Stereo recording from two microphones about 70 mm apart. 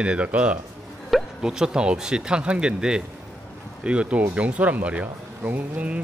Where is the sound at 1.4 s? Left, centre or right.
Centre.